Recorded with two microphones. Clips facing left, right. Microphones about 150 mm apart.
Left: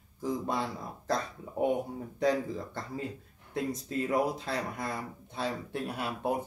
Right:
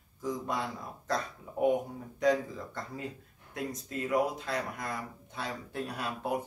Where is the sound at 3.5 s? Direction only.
30° left (ahead or behind).